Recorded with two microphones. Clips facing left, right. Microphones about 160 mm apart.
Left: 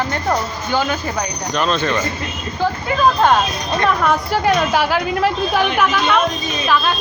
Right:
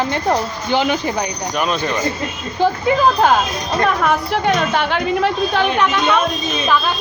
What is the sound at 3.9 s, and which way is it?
A woman's voice, centre (ahead or behind).